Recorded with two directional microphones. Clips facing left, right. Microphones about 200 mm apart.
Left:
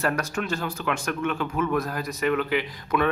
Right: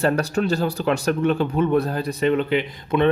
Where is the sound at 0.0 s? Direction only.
35° right (ahead or behind).